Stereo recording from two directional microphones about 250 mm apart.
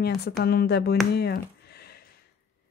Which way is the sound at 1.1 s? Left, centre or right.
Left.